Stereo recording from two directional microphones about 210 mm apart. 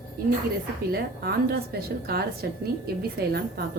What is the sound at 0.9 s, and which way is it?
A woman's voice, 50° right (ahead or behind).